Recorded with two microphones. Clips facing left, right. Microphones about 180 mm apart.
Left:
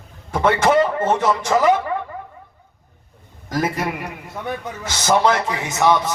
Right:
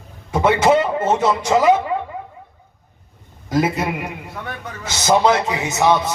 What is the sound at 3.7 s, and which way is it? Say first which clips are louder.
Speech: right 2 dB; 25° right (ahead or behind).